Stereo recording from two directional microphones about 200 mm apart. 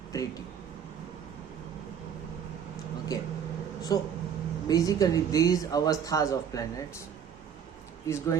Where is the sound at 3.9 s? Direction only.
20° left (ahead or behind).